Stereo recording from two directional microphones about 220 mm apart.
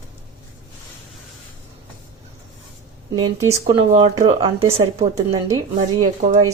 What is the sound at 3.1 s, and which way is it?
Speech, 15° right (ahead or behind).